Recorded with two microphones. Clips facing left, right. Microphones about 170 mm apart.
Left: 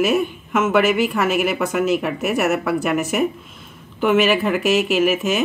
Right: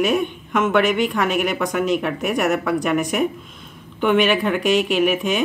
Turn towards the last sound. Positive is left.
turn(degrees=5)  # may be behind; listen again after turning